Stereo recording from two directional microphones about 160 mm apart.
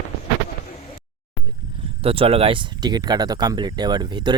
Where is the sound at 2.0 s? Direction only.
35° right (ahead or behind).